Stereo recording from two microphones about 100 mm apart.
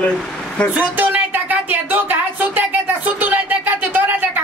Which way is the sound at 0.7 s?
15° right (ahead or behind).